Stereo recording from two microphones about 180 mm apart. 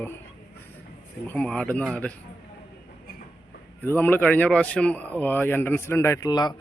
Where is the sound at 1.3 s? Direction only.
5° left (ahead or behind).